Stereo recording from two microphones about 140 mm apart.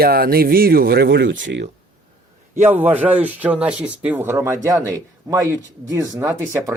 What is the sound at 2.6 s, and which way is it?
Speech, 50° right (ahead or behind).